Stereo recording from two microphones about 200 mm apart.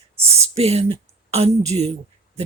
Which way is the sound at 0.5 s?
30° right (ahead or behind).